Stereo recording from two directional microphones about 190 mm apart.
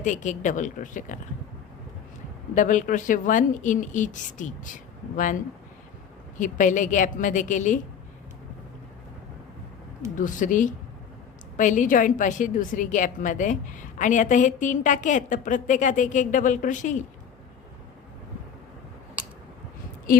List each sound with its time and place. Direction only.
0.0 s a woman's voice: 40° left (ahead or behind)
2.6 s a woman's voice: 45° left (ahead or behind)
6.4 s a woman's voice: 40° left (ahead or behind)
10.2 s a woman's voice: 45° left (ahead or behind)